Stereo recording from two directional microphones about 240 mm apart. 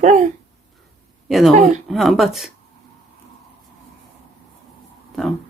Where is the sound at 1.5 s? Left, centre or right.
Right.